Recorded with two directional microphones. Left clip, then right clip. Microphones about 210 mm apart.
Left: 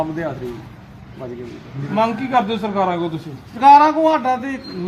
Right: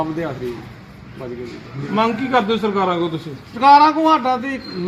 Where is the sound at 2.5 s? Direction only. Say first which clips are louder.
Right 1 dB; 15° left (ahead or behind).